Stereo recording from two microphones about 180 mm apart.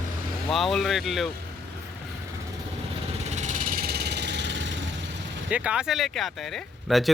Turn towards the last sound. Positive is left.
turn(degrees=0)  # may be behind; listen again after turning